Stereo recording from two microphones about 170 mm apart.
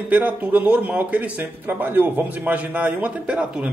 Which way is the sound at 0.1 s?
10° right (ahead or behind).